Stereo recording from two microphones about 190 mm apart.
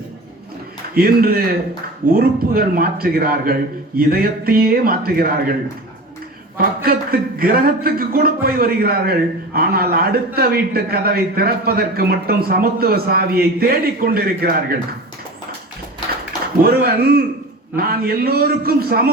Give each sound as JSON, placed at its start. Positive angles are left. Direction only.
{"t": 0.9, "sound": "speech", "side_deg": -50}
{"t": 6.6, "sound": "speech", "side_deg": -50}
{"t": 16.6, "sound": "speech", "side_deg": -55}